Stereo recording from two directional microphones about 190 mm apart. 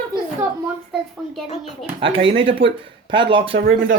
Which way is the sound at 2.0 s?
30° right (ahead or behind).